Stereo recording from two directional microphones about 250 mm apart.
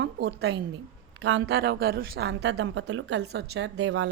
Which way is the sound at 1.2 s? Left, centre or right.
Right.